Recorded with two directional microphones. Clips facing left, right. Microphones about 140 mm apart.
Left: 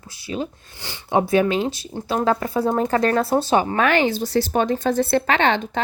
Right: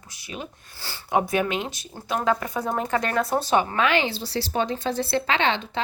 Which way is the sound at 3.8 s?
45° left (ahead or behind).